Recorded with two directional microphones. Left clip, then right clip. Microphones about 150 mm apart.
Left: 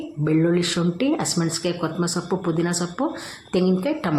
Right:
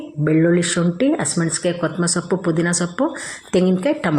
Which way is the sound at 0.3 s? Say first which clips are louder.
Right 4 dB; 15° right (ahead or behind).